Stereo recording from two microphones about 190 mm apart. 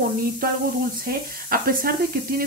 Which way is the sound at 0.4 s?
50° right (ahead or behind).